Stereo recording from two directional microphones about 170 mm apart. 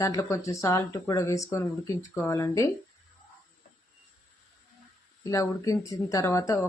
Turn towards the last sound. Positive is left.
turn(degrees=20)  # may be behind; listen again after turning